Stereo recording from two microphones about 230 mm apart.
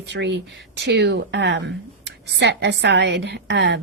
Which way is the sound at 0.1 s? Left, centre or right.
Right.